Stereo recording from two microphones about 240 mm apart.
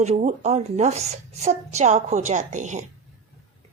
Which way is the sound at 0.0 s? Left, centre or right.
Right.